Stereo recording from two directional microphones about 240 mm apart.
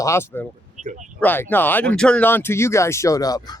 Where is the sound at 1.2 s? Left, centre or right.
Centre.